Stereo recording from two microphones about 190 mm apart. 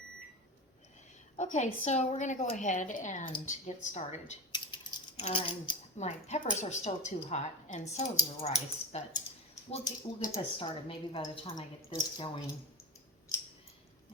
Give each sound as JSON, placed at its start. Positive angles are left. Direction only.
{"t": 1.4, "sound": "a woman's voice", "side_deg": 40}
{"t": 4.5, "sound": "speech", "side_deg": 25}
{"t": 9.8, "sound": "speech", "side_deg": 20}